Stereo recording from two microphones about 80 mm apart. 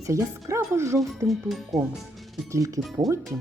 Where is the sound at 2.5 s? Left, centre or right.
Right.